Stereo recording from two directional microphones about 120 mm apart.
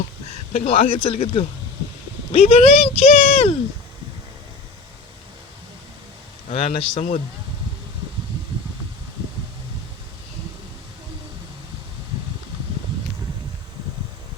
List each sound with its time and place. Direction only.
0.5 s speech: 55° left (ahead or behind)
6.5 s speech: 55° left (ahead or behind)